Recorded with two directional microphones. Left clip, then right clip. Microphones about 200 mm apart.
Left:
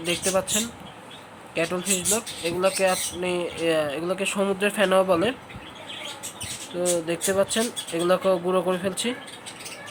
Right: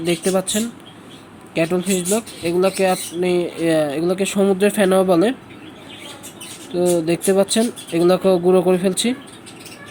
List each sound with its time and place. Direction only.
0.0 s speech: 15° right (ahead or behind)
6.7 s speech: 15° right (ahead or behind)